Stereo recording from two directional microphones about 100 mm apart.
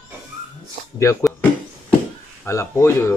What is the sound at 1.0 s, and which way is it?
Speech, 30° left (ahead or behind).